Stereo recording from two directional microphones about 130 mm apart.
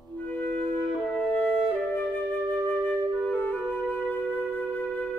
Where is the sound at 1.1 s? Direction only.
15° left (ahead or behind).